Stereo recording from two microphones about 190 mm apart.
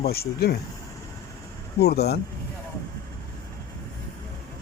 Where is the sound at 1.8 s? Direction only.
55° left (ahead or behind).